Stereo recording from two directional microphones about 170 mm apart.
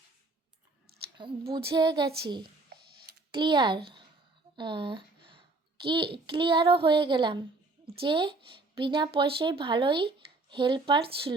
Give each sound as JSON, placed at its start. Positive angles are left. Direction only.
{"t": 1.2, "sound": "speech", "side_deg": -30}
{"t": 3.3, "sound": "speech", "side_deg": -25}
{"t": 4.5, "sound": "a sound", "side_deg": -30}
{"t": 5.8, "sound": "speech", "side_deg": -30}